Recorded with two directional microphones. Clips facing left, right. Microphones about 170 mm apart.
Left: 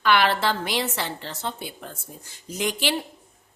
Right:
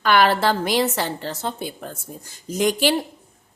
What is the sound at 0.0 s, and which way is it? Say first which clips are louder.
A woman's voice: right 4 dB; 45° right (ahead or behind).